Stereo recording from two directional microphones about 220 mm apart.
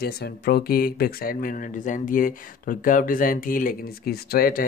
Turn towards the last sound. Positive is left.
turn(degrees=40)  # may be behind; listen again after turning